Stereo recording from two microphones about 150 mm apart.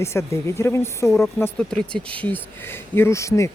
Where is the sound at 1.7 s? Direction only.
5° left (ahead or behind).